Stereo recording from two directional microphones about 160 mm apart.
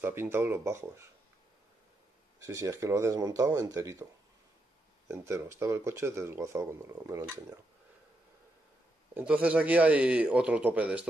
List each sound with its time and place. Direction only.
0.0 s speech: 15° right (ahead or behind)
2.4 s speech: 20° right (ahead or behind)
5.0 s speech: 15° right (ahead or behind)
9.1 s speech: 5° right (ahead or behind)